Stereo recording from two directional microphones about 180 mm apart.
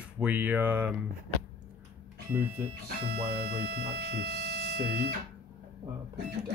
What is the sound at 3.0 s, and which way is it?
Speech, 60° right (ahead or behind).